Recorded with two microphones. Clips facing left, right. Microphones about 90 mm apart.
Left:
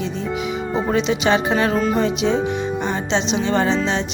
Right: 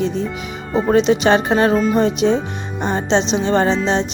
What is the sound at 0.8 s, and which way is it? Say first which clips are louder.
A woman's voice: right 6 dB; 40° right (ahead or behind).